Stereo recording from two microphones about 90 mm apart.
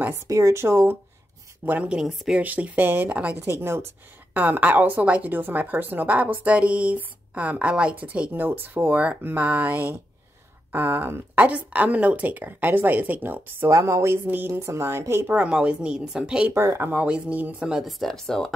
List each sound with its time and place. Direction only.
0.3 s speech: 35° right (ahead or behind)
1.7 s speech: 10° right (ahead or behind)
2.4 s speech: 15° right (ahead or behind)
13.7 s a woman's voice: 35° right (ahead or behind)
14.2 s speech: 20° right (ahead or behind)
14.5 s speech: 30° right (ahead or behind)
15.3 s speech: 15° right (ahead or behind)
16.5 s speech: 30° right (ahead or behind)
16.9 s speech: 15° right (ahead or behind); by 18.5 s 5° left (ahead or behind)